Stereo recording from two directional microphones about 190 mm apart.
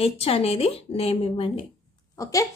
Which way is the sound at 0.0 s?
30° left (ahead or behind).